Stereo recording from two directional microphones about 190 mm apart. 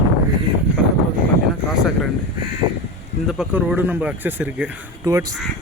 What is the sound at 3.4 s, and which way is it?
Speech, 5° right (ahead or behind).